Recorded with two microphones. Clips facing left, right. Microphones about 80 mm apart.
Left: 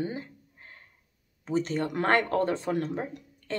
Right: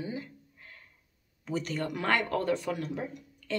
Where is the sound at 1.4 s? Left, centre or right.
Left.